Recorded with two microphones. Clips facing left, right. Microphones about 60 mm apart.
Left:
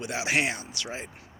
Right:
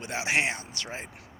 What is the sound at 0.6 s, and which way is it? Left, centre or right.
Speech, right.